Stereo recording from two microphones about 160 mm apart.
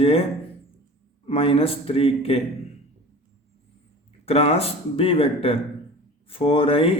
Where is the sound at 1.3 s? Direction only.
35° left (ahead or behind).